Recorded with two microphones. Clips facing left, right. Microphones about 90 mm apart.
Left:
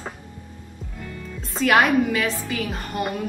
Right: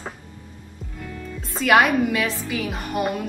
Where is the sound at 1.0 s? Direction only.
5° right (ahead or behind).